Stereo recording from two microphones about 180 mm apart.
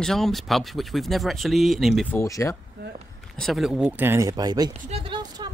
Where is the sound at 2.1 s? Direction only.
15° left (ahead or behind).